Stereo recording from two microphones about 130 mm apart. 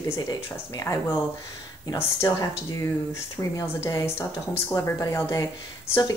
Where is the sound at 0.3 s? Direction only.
30° left (ahead or behind).